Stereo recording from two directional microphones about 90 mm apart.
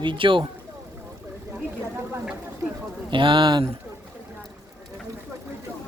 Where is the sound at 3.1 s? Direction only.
65° right (ahead or behind).